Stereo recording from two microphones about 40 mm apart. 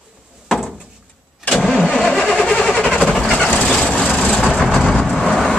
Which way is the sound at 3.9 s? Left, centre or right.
Left.